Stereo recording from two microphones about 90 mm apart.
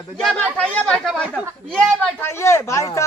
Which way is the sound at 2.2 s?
30° left (ahead or behind).